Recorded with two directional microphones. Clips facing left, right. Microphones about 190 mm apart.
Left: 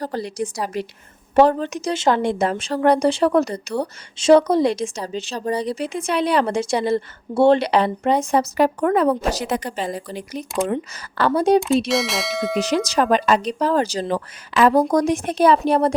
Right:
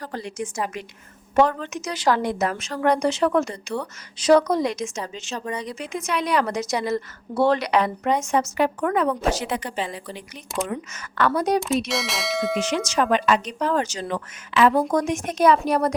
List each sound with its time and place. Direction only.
0.0 s speech: 35° left (ahead or behind)
4.2 s speech: 25° left (ahead or behind)
11.9 s speech: centre (ahead or behind)
12.5 s speech: 35° left (ahead or behind)